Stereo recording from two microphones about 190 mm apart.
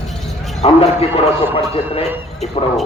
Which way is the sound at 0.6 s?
35° left (ahead or behind).